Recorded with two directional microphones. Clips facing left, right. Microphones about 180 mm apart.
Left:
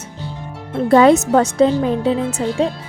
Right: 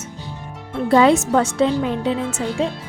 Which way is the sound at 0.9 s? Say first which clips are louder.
Left 3 dB; 45° left (ahead or behind).